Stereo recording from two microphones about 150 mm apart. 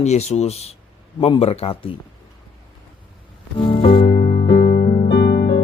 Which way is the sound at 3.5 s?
35° left (ahead or behind).